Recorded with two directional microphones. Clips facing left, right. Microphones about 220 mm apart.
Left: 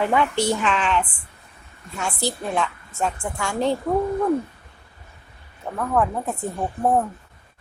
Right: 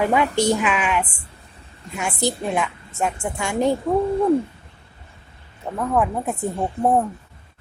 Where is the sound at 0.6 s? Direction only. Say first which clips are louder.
Even; 10° right (ahead or behind).